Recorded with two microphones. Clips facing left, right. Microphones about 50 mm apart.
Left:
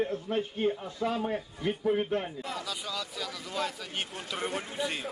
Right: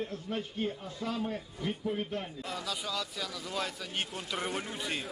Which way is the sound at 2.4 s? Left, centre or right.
Centre.